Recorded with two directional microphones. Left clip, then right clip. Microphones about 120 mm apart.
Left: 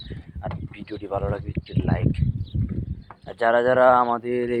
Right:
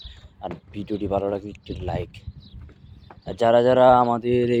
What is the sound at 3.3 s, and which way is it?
Speech, 65° right (ahead or behind).